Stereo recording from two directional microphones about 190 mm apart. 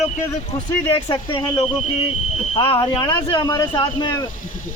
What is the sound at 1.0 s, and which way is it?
Speech, 25° left (ahead or behind).